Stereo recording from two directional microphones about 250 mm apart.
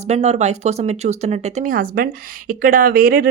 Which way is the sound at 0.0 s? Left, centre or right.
Right.